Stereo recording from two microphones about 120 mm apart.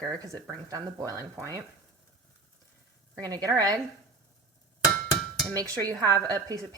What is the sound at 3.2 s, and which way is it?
Speech, 30° right (ahead or behind).